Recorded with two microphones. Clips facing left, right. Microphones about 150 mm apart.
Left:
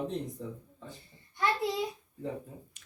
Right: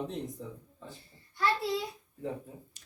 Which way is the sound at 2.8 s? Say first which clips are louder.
Right 1 dB; 35° right (ahead or behind).